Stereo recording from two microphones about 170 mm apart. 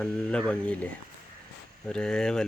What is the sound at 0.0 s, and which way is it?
Speech, 5° left (ahead or behind).